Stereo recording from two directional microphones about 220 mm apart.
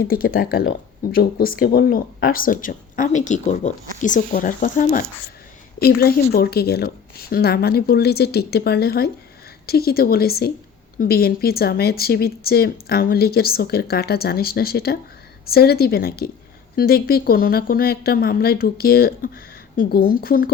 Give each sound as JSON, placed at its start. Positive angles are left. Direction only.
{"t": 0.0, "sound": "speech", "side_deg": 40}